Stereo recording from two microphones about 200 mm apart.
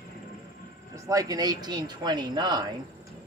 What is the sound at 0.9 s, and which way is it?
Speech, 15° right (ahead or behind).